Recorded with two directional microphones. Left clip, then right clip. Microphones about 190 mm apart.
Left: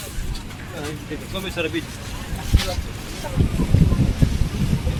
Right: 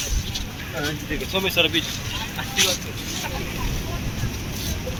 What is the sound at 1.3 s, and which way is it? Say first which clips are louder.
Speech: right 6 dB; 30° right (ahead or behind).